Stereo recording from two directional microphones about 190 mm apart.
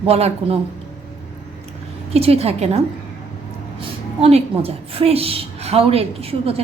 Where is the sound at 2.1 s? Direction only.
30° right (ahead or behind).